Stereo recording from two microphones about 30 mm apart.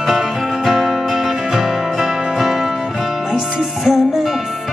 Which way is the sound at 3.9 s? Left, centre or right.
Centre.